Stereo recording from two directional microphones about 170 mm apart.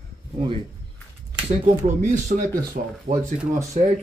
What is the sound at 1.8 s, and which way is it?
Speech, 45° right (ahead or behind).